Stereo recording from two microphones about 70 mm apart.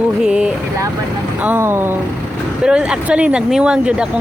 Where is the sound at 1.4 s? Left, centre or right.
Right.